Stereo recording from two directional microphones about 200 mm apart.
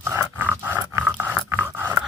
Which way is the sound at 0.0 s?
10° right (ahead or behind).